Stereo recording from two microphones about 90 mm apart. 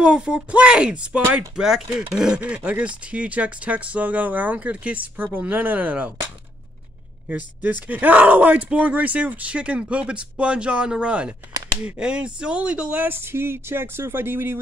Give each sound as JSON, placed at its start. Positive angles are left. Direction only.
{"t": 0.0, "sound": "speech", "side_deg": -10}
{"t": 7.2, "sound": "speech", "side_deg": -15}